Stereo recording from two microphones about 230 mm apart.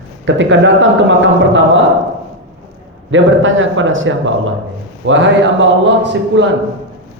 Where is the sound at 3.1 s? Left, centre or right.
Right.